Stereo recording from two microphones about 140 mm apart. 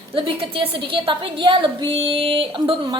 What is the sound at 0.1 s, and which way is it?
A woman's voice, 40° right (ahead or behind).